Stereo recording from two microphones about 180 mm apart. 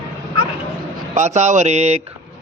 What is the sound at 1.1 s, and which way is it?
Speech, 40° right (ahead or behind).